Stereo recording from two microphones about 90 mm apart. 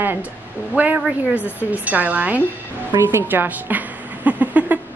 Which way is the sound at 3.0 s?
25° right (ahead or behind).